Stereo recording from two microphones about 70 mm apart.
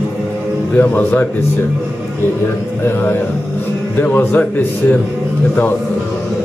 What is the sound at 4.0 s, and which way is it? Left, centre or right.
Speech, left.